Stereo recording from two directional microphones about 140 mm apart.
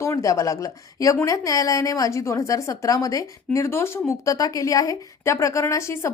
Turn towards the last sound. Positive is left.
turn(degrees=20)  # may be behind; listen again after turning